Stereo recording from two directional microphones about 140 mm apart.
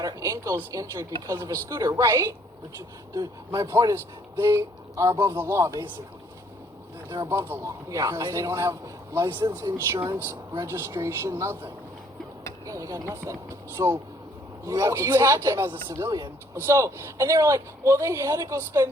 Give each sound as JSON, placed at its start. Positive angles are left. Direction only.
{"t": 0.0, "sound": "a man's voice", "side_deg": -25}
{"t": 7.1, "sound": "a man's voice", "side_deg": -20}